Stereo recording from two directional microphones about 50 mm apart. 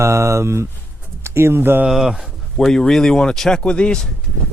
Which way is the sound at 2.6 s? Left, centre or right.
Centre.